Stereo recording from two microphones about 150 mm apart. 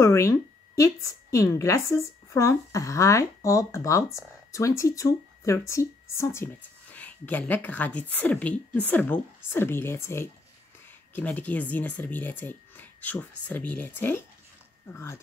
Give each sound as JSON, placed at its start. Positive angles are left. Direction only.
{"t": 0.0, "sound": "a woman's voice", "side_deg": 20}